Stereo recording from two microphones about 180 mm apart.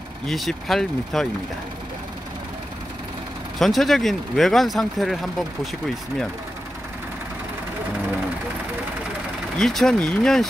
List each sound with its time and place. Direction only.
0.3 s speech: centre (ahead or behind)
3.5 s speech: centre (ahead or behind)
9.6 s speech: centre (ahead or behind)